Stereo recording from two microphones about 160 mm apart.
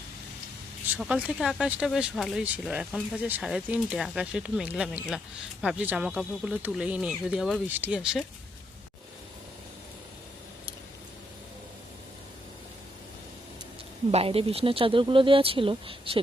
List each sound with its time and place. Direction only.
0.9 s speech: 5° right (ahead or behind)
14.1 s speech: 40° right (ahead or behind)